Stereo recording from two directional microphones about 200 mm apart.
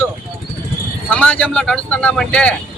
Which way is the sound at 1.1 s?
5° left (ahead or behind).